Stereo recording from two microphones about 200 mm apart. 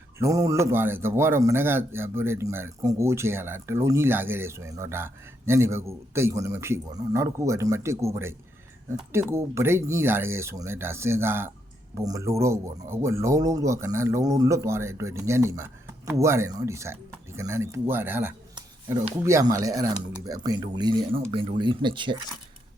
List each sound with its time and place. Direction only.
0.2 s a man's voice: 15° right (ahead or behind)
18.5 s speech: 20° right (ahead or behind)